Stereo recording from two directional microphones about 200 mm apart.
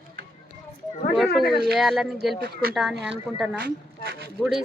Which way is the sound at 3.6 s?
50° right (ahead or behind).